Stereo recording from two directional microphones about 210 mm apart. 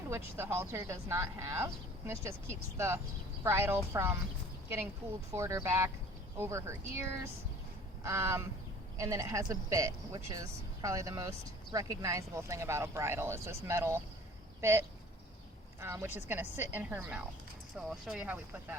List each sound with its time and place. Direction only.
0.1 s speech: 10° right (ahead or behind)
5.3 s speech: 15° right (ahead or behind)
15.8 s speech: 10° right (ahead or behind)